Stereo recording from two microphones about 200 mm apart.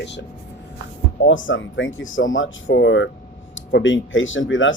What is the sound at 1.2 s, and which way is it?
Speech, 70° left (ahead or behind).